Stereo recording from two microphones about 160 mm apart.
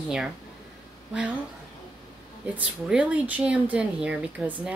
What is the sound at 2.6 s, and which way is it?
Speech, 5° right (ahead or behind).